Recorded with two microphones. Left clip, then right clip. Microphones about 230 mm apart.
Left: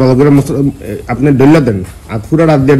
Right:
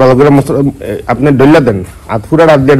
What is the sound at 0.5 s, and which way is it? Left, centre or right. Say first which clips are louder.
A man's voice: right 3 dB; centre.